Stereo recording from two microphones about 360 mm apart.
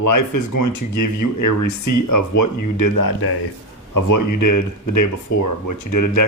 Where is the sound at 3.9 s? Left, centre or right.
Left.